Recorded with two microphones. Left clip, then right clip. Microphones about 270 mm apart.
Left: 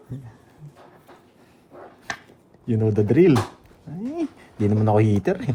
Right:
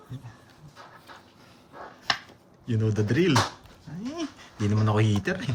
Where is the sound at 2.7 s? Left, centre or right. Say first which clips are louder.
Left 7 dB; centre.